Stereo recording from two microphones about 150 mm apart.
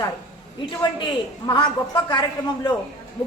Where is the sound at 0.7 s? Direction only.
30° left (ahead or behind).